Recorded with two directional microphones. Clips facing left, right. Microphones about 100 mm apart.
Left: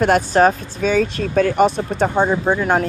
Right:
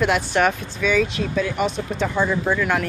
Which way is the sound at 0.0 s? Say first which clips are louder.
Left 5 dB; 40° left (ahead or behind).